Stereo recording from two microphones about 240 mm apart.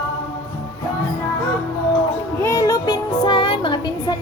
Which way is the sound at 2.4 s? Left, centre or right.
Centre.